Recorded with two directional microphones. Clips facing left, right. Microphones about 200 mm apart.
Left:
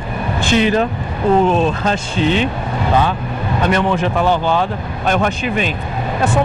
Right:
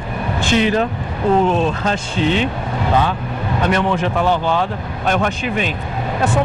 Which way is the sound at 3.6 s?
15° left (ahead or behind).